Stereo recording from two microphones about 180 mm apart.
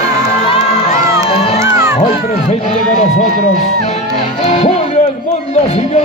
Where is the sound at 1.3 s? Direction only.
35° left (ahead or behind).